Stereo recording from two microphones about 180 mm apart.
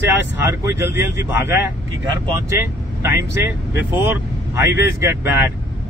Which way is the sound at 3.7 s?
15° right (ahead or behind).